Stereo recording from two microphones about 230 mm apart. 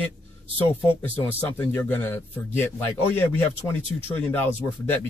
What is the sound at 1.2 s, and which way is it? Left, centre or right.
Speech, centre.